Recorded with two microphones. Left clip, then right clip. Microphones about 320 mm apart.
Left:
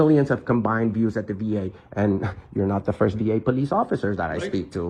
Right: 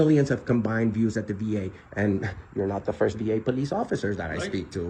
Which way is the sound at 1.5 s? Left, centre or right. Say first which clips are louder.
Left 4 dB; left.